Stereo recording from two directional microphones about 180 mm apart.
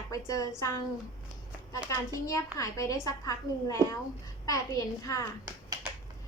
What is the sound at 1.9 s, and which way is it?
A woman's voice, 15° left (ahead or behind).